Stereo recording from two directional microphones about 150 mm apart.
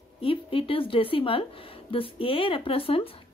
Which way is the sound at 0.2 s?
35° left (ahead or behind).